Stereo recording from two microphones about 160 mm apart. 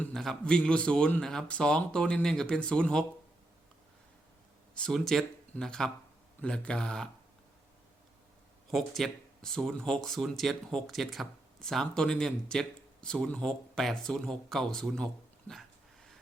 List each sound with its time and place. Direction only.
0.0 s speech: 5° left (ahead or behind)
4.7 s speech: 5° left (ahead or behind)
8.7 s speech: centre (ahead or behind)